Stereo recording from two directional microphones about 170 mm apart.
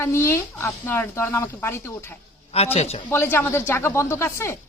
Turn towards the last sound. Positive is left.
turn(degrees=15)  # may be behind; listen again after turning